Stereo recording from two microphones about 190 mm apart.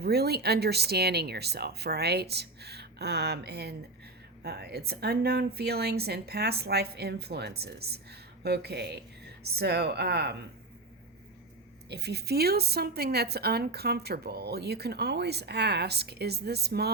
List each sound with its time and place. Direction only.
0.0 s a woman's voice: 55° right (ahead or behind)
11.9 s a woman's voice: 60° right (ahead or behind)